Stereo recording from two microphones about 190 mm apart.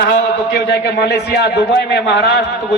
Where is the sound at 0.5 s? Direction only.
60° left (ahead or behind).